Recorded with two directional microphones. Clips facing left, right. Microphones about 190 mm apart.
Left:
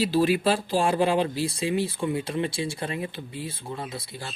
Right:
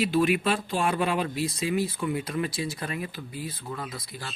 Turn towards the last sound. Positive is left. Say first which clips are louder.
# left 2 dB
turn(degrees=25)  # may be behind; listen again after turning